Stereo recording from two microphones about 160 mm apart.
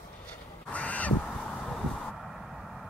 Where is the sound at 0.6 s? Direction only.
10° left (ahead or behind).